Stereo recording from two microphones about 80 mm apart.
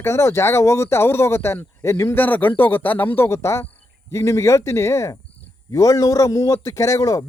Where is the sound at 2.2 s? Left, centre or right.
Left.